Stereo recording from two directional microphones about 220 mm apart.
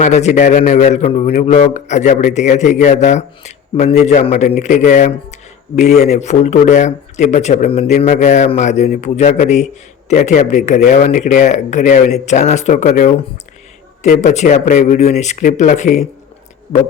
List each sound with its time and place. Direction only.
0.0 s speech: 30° left (ahead or behind)